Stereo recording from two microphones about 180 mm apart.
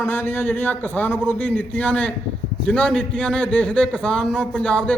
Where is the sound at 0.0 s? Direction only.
10° left (ahead or behind).